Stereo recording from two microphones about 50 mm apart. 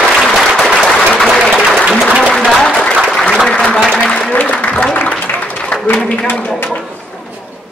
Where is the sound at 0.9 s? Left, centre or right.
Centre.